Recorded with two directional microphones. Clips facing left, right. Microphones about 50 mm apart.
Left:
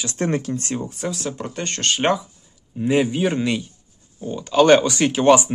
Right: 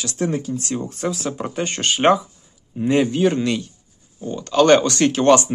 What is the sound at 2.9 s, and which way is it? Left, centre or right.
Speech, centre.